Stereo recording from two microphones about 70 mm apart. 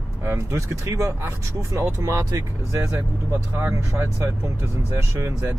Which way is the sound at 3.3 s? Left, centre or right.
Right.